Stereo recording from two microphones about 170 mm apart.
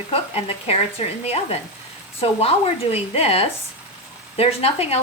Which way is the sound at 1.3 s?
40° left (ahead or behind).